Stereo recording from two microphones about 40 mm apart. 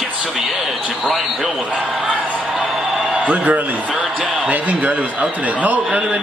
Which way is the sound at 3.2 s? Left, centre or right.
Right.